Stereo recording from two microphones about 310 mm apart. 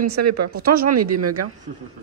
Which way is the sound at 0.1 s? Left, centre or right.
Right.